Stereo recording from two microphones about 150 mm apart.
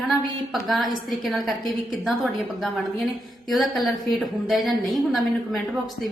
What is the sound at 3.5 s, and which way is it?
A woman's voice, centre (ahead or behind).